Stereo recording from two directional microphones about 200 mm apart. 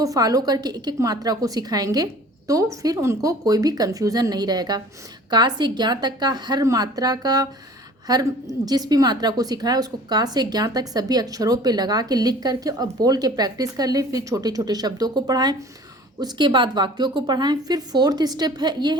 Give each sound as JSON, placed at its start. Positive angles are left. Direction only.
{"t": 0.0, "sound": "a woman's voice", "side_deg": -15}